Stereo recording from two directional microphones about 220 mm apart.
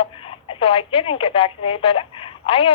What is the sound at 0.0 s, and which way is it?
Speech, 25° left (ahead or behind).